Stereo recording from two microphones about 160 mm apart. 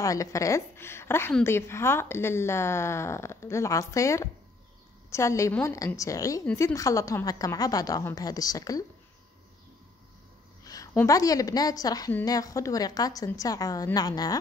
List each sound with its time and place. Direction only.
0.0 s a woman's voice: 20° left (ahead or behind)
10.6 s a sound: 20° left (ahead or behind)
11.0 s a woman's voice: 20° left (ahead or behind)